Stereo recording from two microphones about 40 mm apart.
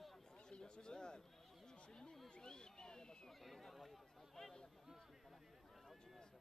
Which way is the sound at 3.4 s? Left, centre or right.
Centre.